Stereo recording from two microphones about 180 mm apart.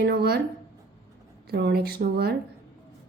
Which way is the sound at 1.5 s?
65° right (ahead or behind).